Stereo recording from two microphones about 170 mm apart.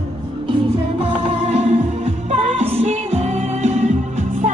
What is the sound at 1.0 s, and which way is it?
Music, 35° right (ahead or behind).